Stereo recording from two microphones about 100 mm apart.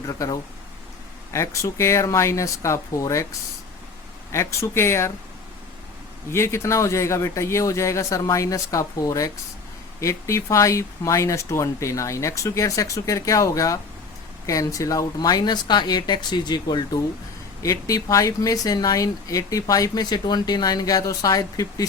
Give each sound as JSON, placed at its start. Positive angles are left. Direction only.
{"t": 0.1, "sound": "speech", "side_deg": 35}
{"t": 4.3, "sound": "speech", "side_deg": 30}
{"t": 6.3, "sound": "speech", "side_deg": 25}